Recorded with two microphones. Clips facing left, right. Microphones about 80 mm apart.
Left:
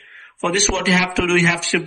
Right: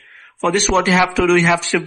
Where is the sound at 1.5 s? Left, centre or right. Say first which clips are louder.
Right 4 dB; right.